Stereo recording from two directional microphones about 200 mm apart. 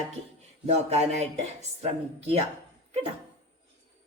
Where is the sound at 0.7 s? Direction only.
35° right (ahead or behind).